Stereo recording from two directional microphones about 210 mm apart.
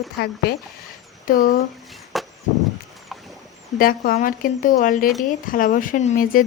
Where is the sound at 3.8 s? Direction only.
45° left (ahead or behind).